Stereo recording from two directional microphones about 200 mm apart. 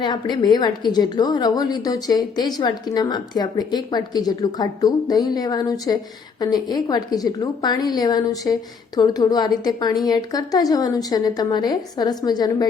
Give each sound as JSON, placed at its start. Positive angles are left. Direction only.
{"t": 0.0, "sound": "a woman's voice", "side_deg": 20}